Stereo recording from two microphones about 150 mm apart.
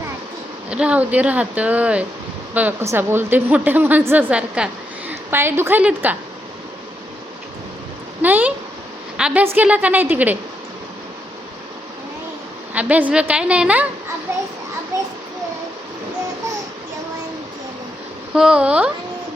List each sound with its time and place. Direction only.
0.7 s a woman's voice: 10° right (ahead or behind)
8.2 s a woman's voice: 10° right (ahead or behind)
12.7 s a woman's voice: 10° right (ahead or behind)
18.3 s a woman's voice: 5° right (ahead or behind)